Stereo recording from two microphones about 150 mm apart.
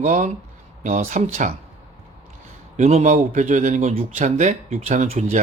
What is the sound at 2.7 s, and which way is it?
A man's voice, 50° right (ahead or behind).